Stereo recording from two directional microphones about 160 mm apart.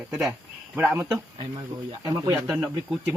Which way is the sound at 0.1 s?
Centre (ahead or behind).